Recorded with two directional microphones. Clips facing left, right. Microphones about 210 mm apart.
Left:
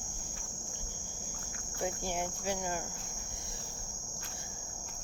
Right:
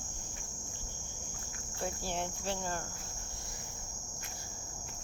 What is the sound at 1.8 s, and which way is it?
Speech, 15° left (ahead or behind).